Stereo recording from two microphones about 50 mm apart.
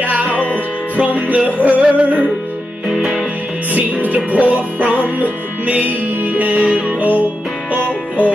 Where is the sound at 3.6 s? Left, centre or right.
Right.